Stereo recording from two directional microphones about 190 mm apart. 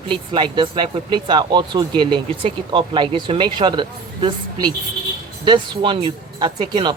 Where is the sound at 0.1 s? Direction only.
25° right (ahead or behind).